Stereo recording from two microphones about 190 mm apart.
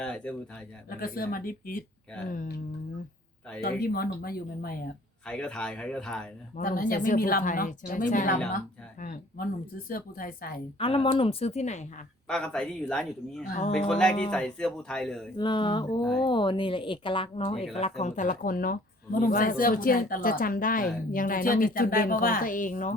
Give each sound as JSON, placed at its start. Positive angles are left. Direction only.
{"t": 0.0, "sound": "a man's voice", "side_deg": 5}
{"t": 0.9, "sound": "a woman's voice", "side_deg": 50}
{"t": 3.8, "sound": "a woman's voice", "side_deg": 55}
{"t": 5.2, "sound": "a man's voice", "side_deg": 5}
{"t": 6.6, "sound": "a woman's voice", "side_deg": 50}
{"t": 10.8, "sound": "speech", "side_deg": 30}
{"t": 12.3, "sound": "a man's voice", "side_deg": 5}
{"t": 15.4, "sound": "a woman's voice", "side_deg": 25}